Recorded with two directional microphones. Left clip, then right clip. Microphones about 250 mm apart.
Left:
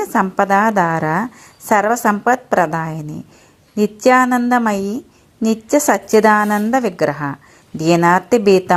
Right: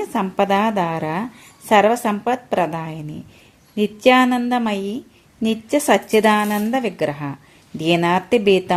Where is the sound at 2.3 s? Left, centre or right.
Centre.